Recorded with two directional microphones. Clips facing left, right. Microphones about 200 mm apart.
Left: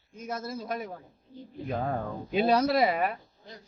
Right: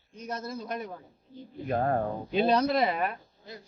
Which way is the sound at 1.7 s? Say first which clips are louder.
Right 4 dB; 50° right (ahead or behind).